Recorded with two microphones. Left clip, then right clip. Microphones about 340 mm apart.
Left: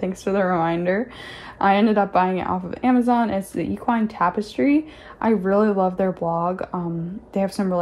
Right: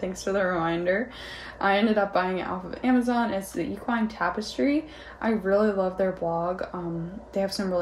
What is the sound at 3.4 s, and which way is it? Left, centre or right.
Speech, centre.